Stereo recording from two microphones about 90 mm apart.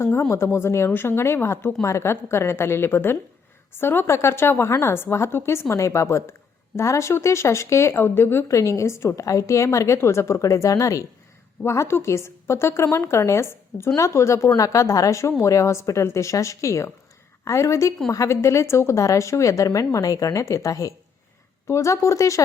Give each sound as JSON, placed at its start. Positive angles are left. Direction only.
{"t": 0.1, "sound": "a woman's voice", "side_deg": 30}